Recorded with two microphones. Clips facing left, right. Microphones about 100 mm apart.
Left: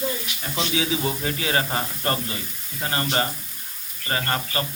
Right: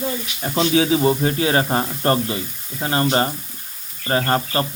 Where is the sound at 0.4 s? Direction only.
45° right (ahead or behind).